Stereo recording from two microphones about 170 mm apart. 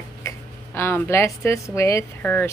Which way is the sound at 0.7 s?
15° left (ahead or behind).